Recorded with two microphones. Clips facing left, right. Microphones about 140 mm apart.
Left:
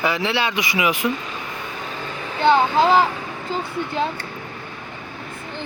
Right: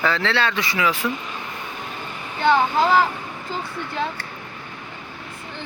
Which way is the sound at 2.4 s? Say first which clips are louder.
Left 2 dB; 20° left (ahead or behind).